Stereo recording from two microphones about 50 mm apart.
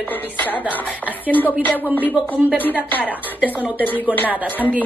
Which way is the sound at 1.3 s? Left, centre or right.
Left.